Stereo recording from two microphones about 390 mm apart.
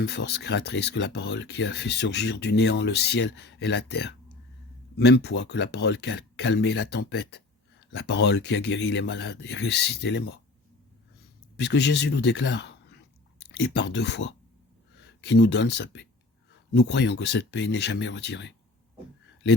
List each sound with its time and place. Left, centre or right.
0.0 s speech: left
9.6 s speech: left
10.0 s speech: left
11.5 s speech: left